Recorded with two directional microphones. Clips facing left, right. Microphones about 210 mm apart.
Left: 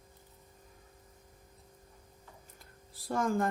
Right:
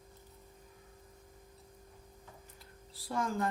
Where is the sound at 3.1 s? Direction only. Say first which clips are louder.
Left 4 dB; 45° left (ahead or behind).